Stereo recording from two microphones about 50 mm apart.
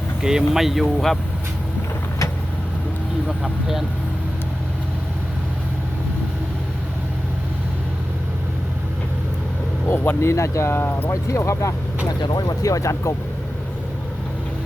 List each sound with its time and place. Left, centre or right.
0.2 s speech: centre
0.9 s speech: centre
9.9 s speech: left
10.2 s speech: left
10.7 s speech: left
11.1 s speech: left
12.7 s speech: left